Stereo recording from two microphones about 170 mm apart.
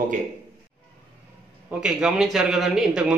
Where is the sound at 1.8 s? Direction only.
Centre (ahead or behind).